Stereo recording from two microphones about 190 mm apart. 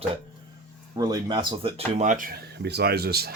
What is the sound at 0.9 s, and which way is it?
Speech, 20° right (ahead or behind).